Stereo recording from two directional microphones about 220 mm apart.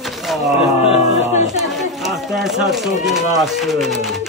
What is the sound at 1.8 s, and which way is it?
Speech, centre (ahead or behind).